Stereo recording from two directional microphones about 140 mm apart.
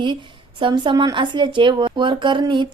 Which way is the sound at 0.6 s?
35° right (ahead or behind).